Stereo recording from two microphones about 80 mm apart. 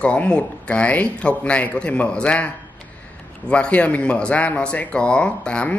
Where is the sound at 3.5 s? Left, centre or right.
Centre.